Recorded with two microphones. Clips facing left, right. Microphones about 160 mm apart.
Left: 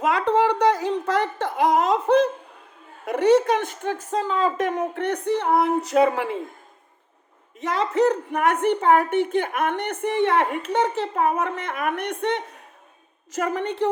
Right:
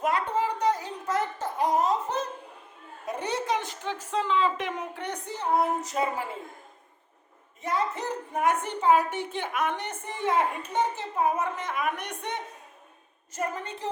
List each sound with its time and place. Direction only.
0.0 s a sound: 90° left; by 2.3 s 75° left (ahead or behind)
3.1 s a woman's voice: 70° left (ahead or behind)
7.6 s a woman's voice: 90° left; by 12.4 s 60° left (ahead or behind)
13.3 s a woman's voice: 90° left; by 13.9 s 65° left (ahead or behind)